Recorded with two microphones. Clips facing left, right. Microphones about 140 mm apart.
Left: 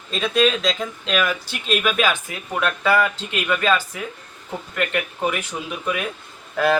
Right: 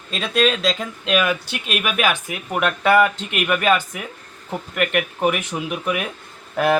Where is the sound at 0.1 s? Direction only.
Centre (ahead or behind).